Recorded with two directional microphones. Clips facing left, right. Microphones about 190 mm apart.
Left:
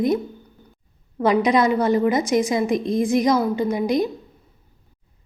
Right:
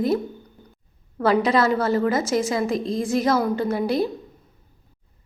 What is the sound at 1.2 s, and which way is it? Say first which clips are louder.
A woman's voice: left 1 dB; 15° left (ahead or behind).